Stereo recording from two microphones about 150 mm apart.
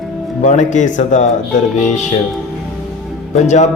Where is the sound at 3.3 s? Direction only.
50° left (ahead or behind).